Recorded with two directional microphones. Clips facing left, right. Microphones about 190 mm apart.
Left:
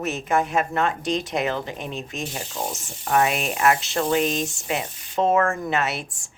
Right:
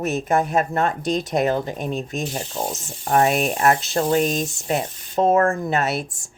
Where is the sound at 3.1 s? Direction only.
40° right (ahead or behind).